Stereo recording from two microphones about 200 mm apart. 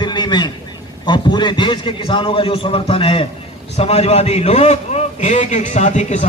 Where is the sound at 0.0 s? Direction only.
20° left (ahead or behind).